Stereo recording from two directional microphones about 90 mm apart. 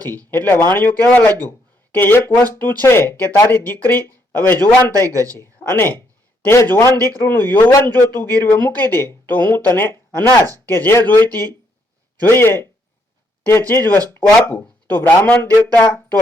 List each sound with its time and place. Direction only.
0.1 s a man's voice: 20° left (ahead or behind)